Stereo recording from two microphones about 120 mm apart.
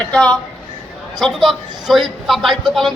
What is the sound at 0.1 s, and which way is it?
A man's voice, 10° left (ahead or behind).